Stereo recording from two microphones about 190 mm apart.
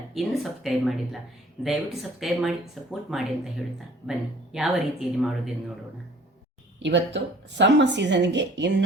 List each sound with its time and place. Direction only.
0.1 s speech: centre (ahead or behind)
4.5 s speech: centre (ahead or behind)
6.8 s a woman's voice: 70° right (ahead or behind)